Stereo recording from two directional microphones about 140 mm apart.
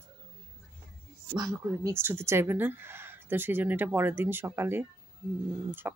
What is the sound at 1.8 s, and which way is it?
Speech, 20° right (ahead or behind).